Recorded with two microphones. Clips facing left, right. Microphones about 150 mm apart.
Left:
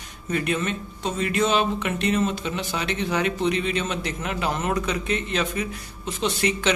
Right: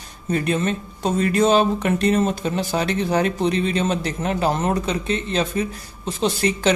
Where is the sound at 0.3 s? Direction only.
35° right (ahead or behind).